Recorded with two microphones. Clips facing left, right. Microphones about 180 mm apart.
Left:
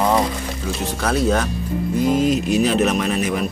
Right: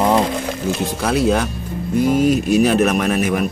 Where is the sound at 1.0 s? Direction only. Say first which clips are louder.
Right 2 dB; 10° right (ahead or behind).